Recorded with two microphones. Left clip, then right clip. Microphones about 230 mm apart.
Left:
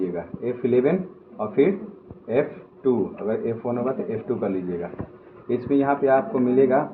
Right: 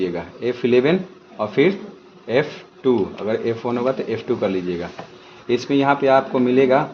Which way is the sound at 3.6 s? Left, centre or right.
Right.